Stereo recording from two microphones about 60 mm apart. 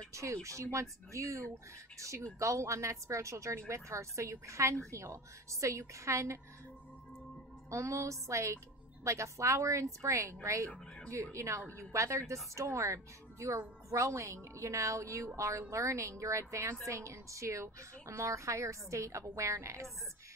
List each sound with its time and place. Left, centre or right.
0.1 s a woman's voice: right
7.7 s a woman's voice: right